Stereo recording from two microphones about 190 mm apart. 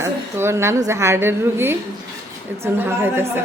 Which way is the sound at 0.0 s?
15° right (ahead or behind).